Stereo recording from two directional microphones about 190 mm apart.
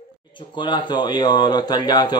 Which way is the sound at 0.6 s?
25° left (ahead or behind).